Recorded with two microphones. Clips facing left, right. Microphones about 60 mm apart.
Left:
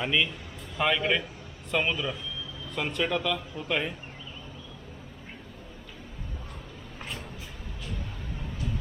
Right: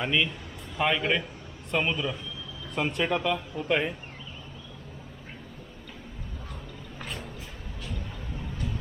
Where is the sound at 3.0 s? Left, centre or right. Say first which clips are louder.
Right 1 dB; right.